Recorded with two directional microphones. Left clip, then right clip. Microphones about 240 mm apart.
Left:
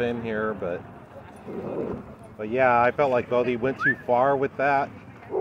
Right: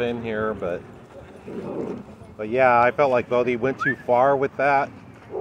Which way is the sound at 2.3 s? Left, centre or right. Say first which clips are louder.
Right 3 dB; centre.